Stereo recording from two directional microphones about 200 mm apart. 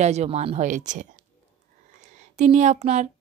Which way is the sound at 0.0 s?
35° right (ahead or behind).